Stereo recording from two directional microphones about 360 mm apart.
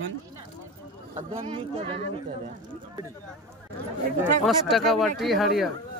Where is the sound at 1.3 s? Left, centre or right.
Centre.